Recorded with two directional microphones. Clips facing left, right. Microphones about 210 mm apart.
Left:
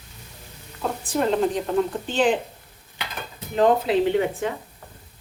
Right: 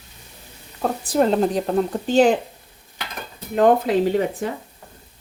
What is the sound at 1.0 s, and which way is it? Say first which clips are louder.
A woman's voice: right 3 dB; 35° right (ahead or behind).